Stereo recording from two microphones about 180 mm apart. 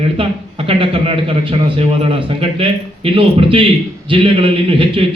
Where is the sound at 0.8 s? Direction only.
30° right (ahead or behind).